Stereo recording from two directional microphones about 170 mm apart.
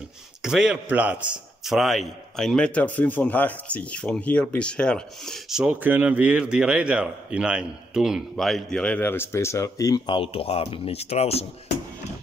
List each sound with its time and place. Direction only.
0.4 s a man's voice: 5° right (ahead or behind); by 11.4 s 35° left (ahead or behind)